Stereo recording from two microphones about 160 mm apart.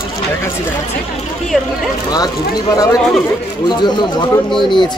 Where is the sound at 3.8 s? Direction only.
30° left (ahead or behind).